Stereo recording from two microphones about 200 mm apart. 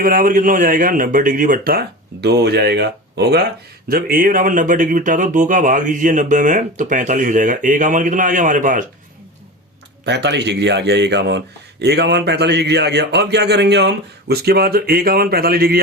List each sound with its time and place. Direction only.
0.0 s speech: 45° right (ahead or behind)
10.1 s speech: 60° right (ahead or behind)